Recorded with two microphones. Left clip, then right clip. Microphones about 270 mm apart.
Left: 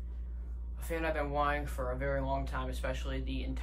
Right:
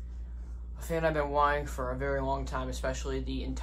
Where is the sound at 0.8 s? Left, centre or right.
Right.